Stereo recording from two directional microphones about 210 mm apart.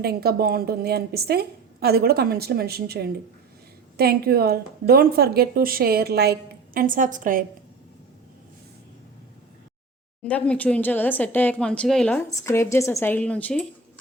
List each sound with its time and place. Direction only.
0.0 s a woman's voice: 50° right (ahead or behind)
10.2 s speech: 5° left (ahead or behind)